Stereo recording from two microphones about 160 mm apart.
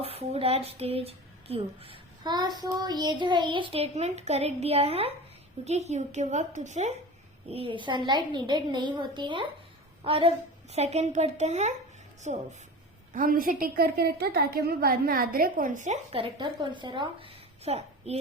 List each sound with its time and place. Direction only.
0.0 s a woman's voice: 40° right (ahead or behind)
13.1 s a woman's voice: 60° right (ahead or behind)
16.1 s a woman's voice: 30° right (ahead or behind)